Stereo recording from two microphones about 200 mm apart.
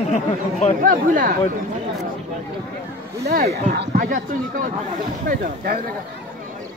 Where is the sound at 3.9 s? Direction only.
40° right (ahead or behind).